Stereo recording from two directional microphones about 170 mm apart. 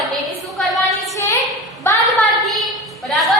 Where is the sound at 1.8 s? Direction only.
15° left (ahead or behind).